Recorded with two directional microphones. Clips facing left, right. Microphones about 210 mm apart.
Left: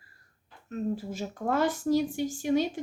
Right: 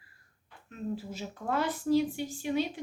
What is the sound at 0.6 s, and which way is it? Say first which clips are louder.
A woman's voice: left 5 dB; 45° left (ahead or behind).